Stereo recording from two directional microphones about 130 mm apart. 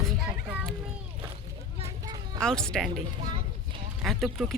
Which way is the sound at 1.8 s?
30° right (ahead or behind).